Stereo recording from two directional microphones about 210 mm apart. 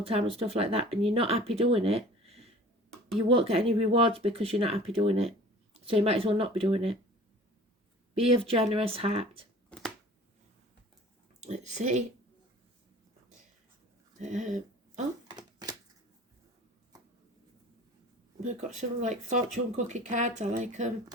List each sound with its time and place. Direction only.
0.0 s speech: 30° right (ahead or behind)
8.2 s speech: 30° right (ahead or behind)
9.6 s a sound: 5° left (ahead or behind)
11.3 s speech: 35° right (ahead or behind)
14.2 s speech: 35° right (ahead or behind)
15.4 s a sound: 20° right (ahead or behind)
18.3 s speech: 35° right (ahead or behind)